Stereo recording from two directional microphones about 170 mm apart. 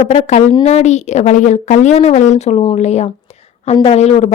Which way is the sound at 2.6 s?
40° left (ahead or behind).